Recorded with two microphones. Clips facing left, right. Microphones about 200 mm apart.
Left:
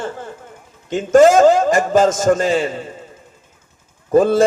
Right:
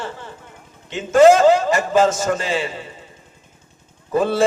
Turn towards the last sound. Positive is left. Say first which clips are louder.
# left 6 dB
turn(degrees=45)  # may be behind; listen again after turning